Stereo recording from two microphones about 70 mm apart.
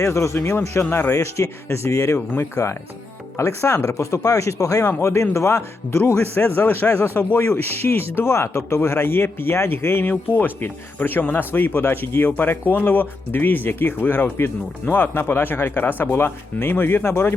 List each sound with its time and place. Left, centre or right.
0.0 s speech: left
2.6 s speech: left
3.3 s speech: left
4.9 s speech: left
6.4 s speech: left